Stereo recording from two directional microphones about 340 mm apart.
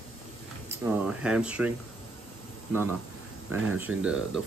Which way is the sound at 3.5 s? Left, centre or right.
Centre.